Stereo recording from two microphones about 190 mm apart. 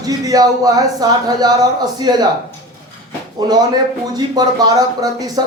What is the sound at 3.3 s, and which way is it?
Speech, 20° right (ahead or behind).